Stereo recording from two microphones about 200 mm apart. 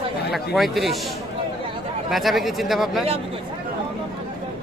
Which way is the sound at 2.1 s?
Centre (ahead or behind).